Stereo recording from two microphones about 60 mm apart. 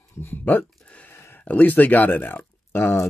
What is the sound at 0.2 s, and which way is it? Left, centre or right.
Speech, left.